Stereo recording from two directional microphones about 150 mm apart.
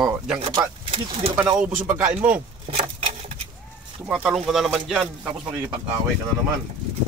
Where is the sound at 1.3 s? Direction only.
15° right (ahead or behind).